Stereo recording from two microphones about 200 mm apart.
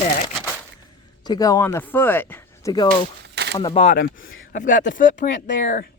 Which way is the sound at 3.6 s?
20° left (ahead or behind).